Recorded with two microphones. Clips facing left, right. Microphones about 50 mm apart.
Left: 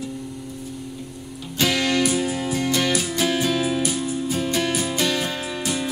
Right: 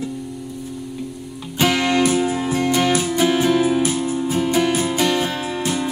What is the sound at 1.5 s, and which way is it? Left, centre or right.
Music, right.